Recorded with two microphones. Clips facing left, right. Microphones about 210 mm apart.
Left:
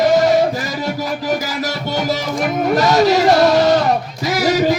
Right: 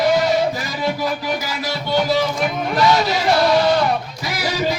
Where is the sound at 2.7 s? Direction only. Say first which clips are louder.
Left 5 dB; 45° left (ahead or behind).